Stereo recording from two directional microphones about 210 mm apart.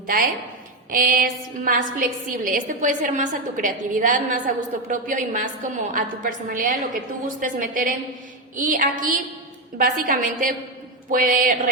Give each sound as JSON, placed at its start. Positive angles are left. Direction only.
{"t": 0.9, "sound": "a woman's voice", "side_deg": -45}